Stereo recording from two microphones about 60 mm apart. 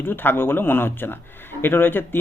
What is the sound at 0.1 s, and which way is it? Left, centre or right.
Speech, left.